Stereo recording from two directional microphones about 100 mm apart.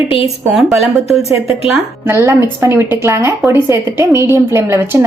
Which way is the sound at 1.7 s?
25° right (ahead or behind).